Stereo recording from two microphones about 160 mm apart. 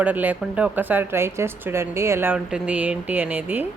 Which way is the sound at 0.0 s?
10° right (ahead or behind).